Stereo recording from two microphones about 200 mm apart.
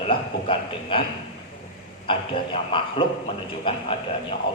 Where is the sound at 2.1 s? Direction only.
25° left (ahead or behind).